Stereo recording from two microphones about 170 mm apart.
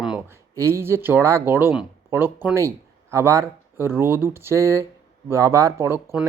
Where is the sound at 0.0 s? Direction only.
5° right (ahead or behind).